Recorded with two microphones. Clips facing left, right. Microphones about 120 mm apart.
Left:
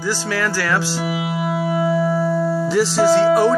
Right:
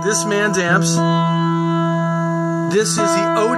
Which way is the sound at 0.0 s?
10° right (ahead or behind).